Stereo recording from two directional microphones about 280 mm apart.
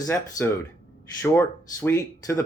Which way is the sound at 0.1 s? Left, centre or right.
Centre.